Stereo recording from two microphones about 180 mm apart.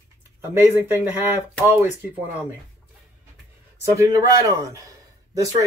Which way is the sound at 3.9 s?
15° right (ahead or behind).